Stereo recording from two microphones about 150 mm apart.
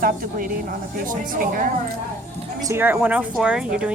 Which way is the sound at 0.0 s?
70° right (ahead or behind).